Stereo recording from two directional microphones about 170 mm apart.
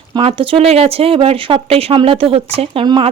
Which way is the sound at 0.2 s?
35° right (ahead or behind).